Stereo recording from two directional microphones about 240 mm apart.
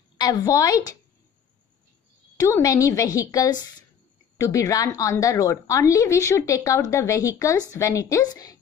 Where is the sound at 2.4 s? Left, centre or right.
Centre.